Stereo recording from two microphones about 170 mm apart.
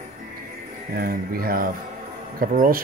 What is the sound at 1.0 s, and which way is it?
Speech, 60° right (ahead or behind).